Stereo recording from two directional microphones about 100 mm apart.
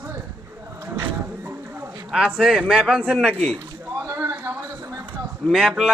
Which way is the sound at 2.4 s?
5° right (ahead or behind).